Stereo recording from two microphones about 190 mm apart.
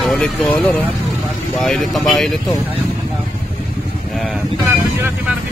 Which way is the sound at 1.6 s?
Centre (ahead or behind).